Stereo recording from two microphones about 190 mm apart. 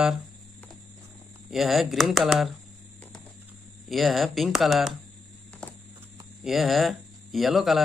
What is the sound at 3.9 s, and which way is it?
Speech, centre (ahead or behind).